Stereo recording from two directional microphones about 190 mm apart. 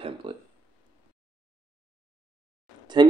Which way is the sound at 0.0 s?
25° right (ahead or behind).